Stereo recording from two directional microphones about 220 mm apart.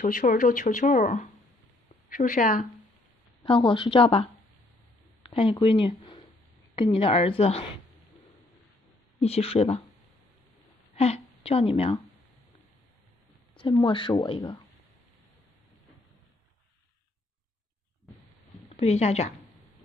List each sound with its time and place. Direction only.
0.0 s a woman's voice: 35° left (ahead or behind)
3.4 s speech: 20° left (ahead or behind)
9.2 s speech: 25° left (ahead or behind)
11.0 s a woman's voice: 25° left (ahead or behind)
13.6 s speech: 20° left (ahead or behind)
18.8 s speech: 30° left (ahead or behind)